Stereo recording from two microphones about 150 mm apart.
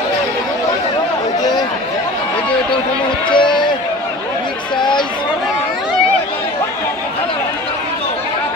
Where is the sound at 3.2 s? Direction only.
30° left (ahead or behind).